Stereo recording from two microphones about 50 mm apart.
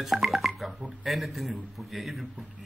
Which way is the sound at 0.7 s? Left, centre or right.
Right.